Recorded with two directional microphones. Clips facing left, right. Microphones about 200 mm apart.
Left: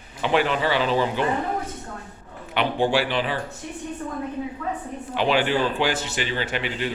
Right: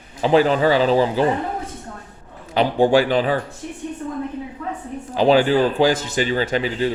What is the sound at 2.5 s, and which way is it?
Speech, 40° right (ahead or behind).